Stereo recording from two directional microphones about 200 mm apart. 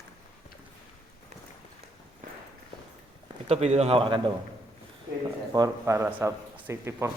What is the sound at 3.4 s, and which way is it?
Speech, 30° right (ahead or behind).